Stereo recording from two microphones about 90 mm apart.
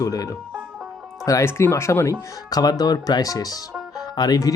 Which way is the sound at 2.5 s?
45° left (ahead or behind).